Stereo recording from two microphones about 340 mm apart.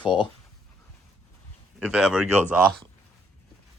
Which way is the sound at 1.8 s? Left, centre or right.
Centre.